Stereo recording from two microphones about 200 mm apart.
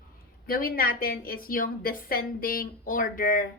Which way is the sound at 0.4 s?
45° left (ahead or behind).